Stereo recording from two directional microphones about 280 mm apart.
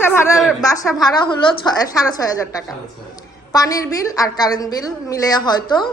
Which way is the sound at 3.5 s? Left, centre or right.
Centre.